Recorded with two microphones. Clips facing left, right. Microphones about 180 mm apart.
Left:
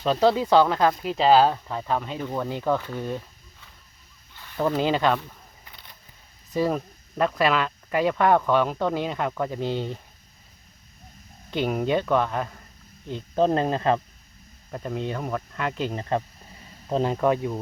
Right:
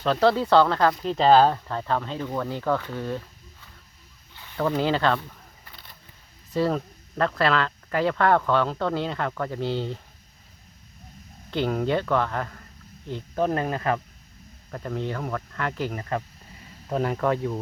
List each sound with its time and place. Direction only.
0.0 s speech: 15° left (ahead or behind)
4.8 s speech: 15° left (ahead or behind)
6.5 s speech: 15° left (ahead or behind)
11.5 s speech: 15° left (ahead or behind)